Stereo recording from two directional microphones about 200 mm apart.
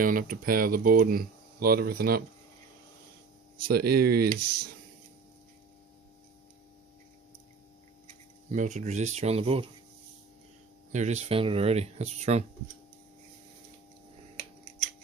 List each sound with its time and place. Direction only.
0.0 s speech: 45° right (ahead or behind)
3.7 s speech: 50° right (ahead or behind)
8.4 s speech: 35° right (ahead or behind)
10.9 s speech: 35° right (ahead or behind)